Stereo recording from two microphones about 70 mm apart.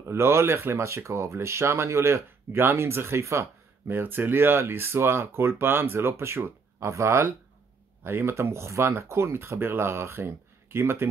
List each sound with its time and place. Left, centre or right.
0.0 s speech: right